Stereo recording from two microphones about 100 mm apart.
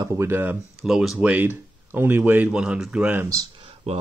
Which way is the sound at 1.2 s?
15° right (ahead or behind).